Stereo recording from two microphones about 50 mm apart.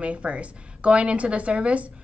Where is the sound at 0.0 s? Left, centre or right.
Right.